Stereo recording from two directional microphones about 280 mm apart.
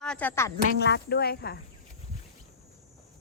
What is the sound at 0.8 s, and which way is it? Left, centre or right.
Speech, left.